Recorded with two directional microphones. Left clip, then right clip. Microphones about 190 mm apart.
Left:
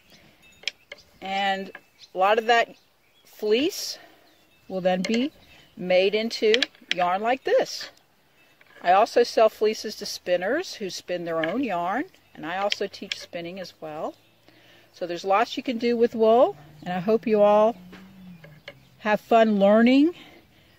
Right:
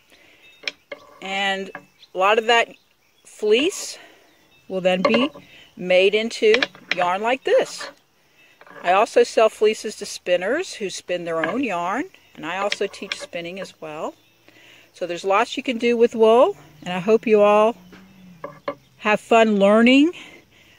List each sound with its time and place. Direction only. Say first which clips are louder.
1.2 s speech: right 2 dB; 20° right (ahead or behind)
18.9 s speech: right 3 dB; 20° right (ahead or behind)